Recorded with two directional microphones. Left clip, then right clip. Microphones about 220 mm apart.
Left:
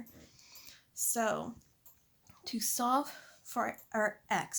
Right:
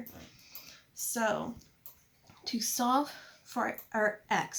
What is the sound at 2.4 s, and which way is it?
Speech, 45° left (ahead or behind).